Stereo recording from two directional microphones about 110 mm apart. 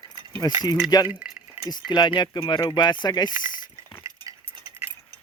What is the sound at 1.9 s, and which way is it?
Speech, 40° left (ahead or behind).